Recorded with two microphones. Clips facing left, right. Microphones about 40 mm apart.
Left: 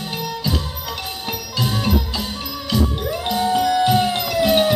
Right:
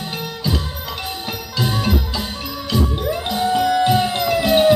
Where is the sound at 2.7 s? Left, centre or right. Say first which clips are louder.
Right 1 dB; right.